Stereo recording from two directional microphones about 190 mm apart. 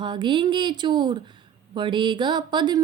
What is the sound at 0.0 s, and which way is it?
Speech, 25° right (ahead or behind).